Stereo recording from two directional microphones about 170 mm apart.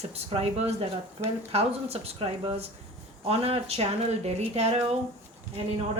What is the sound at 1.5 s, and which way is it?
Speech, 35° right (ahead or behind).